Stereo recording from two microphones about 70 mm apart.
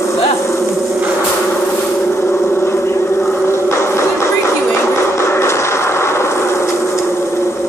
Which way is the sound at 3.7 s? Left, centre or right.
Left.